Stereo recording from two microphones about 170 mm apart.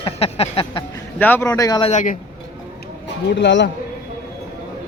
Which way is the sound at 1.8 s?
45° left (ahead or behind).